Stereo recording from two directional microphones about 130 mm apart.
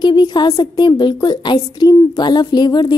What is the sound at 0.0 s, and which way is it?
A woman's voice, 35° left (ahead or behind).